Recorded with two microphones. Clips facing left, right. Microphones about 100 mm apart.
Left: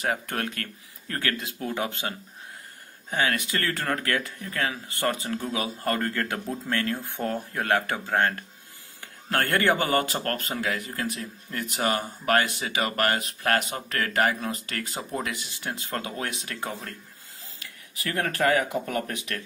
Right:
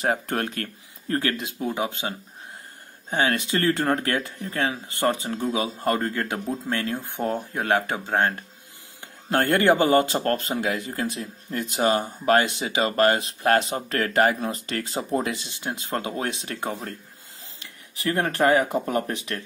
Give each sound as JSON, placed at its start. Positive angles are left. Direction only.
{"t": 0.0, "sound": "a man's voice", "side_deg": -30}
{"t": 3.1, "sound": "a man's voice", "side_deg": -30}